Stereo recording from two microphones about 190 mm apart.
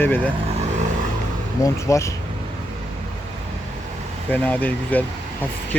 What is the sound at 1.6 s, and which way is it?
Speech, 15° left (ahead or behind).